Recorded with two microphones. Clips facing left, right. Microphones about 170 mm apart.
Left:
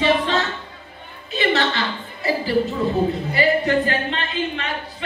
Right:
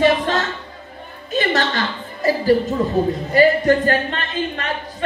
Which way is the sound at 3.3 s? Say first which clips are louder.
Right 8 dB; 45° right (ahead or behind).